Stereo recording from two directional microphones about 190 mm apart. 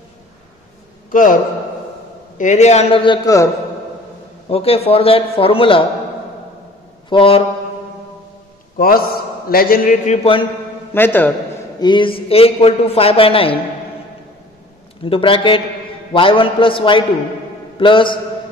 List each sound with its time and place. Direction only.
1.1 s a man's voice: 45° left (ahead or behind); by 3.4 s 20° left (ahead or behind)
4.5 s a man's voice: 30° left (ahead or behind)
7.1 s a man's voice: 30° left (ahead or behind)
8.7 s a man's voice: 50° left (ahead or behind)
11.0 s a man's voice: 10° left (ahead or behind)
11.8 s a man's voice: 25° left (ahead or behind)
15.0 s a man's voice: 30° left (ahead or behind)